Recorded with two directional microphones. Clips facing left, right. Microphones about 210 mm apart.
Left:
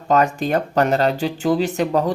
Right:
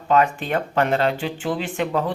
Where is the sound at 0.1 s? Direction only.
40° left (ahead or behind).